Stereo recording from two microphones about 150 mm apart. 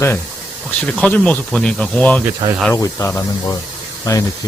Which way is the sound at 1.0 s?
10° left (ahead or behind).